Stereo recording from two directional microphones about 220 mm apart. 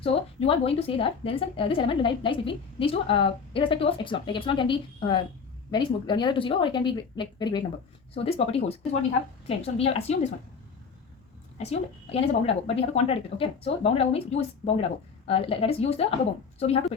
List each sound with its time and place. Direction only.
0.0 s a woman's voice: 25° left (ahead or behind)
11.5 s a woman's voice: 30° left (ahead or behind)